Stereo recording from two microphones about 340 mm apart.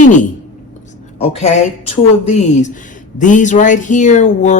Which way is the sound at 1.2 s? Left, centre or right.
Centre.